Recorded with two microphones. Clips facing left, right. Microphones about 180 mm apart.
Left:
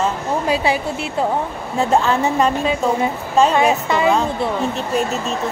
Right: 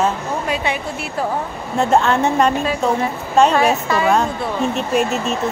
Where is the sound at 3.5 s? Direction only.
20° left (ahead or behind).